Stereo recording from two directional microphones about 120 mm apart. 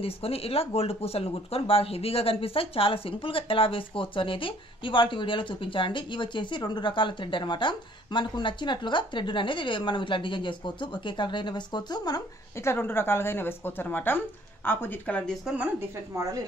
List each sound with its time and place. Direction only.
0.0 s speech: 55° left (ahead or behind); by 12.2 s 35° left (ahead or behind)
12.6 s speech: 20° left (ahead or behind)
15.4 s speech: 10° right (ahead or behind)
16.2 s speech: 30° right (ahead or behind)